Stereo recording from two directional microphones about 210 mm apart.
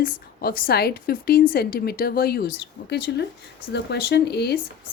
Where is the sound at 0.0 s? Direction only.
45° left (ahead or behind).